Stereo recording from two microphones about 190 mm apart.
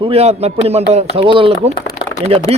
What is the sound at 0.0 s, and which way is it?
Speech, 30° right (ahead or behind).